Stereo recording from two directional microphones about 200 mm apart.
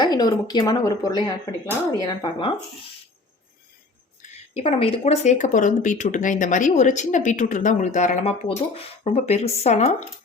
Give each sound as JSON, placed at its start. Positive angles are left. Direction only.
{"t": 0.0, "sound": "speech", "side_deg": 20}
{"t": 4.5, "sound": "speech", "side_deg": 30}